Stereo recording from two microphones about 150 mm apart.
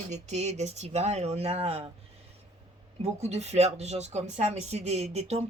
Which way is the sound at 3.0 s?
45° right (ahead or behind).